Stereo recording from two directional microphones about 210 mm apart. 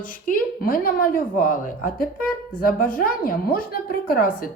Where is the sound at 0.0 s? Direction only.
40° left (ahead or behind).